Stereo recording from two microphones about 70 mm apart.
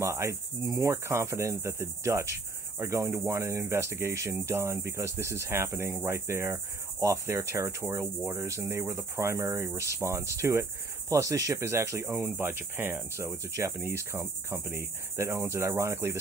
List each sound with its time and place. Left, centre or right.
0.0 s cricket: right
8.5 s speech: right